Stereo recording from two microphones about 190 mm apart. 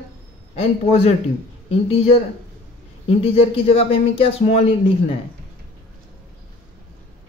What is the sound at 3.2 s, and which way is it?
Speech, 30° left (ahead or behind).